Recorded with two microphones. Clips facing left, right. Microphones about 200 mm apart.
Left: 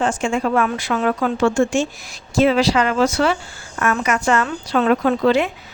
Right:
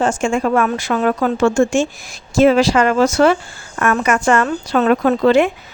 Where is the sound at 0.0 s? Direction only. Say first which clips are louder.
Right 3 dB; 45° right (ahead or behind).